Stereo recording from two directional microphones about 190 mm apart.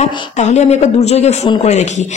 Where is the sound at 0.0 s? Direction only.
40° left (ahead or behind).